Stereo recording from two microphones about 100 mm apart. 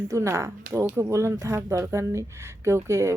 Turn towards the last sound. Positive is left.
turn(degrees=-30)  # may be behind; listen again after turning